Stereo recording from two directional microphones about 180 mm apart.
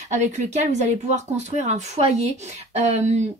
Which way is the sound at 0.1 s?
40° right (ahead or behind).